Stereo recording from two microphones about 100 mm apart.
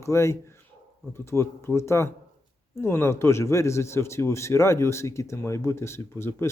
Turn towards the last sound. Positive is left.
turn(degrees=25)  # may be behind; listen again after turning